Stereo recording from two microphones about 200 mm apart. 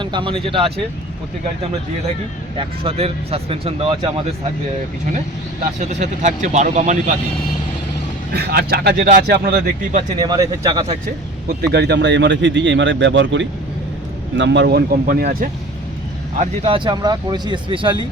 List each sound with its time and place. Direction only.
0.0 s speech: 25° right (ahead or behind)
2.6 s speech: 30° right (ahead or behind)
5.9 s speech: 35° right (ahead or behind)
8.3 s speech: 50° right (ahead or behind)
10.2 s speech: 20° right (ahead or behind)
11.4 s speech: 55° right (ahead or behind)
16.4 s speech: 25° right (ahead or behind)